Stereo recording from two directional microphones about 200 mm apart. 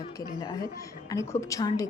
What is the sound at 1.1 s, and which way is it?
Speech, 15° left (ahead or behind).